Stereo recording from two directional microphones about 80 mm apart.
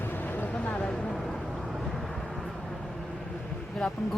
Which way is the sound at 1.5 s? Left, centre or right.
Centre.